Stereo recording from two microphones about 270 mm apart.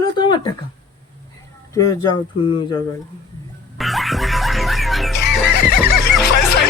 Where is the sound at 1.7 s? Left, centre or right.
Centre.